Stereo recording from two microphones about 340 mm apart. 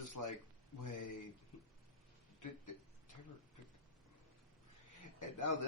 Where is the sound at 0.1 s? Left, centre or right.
Left.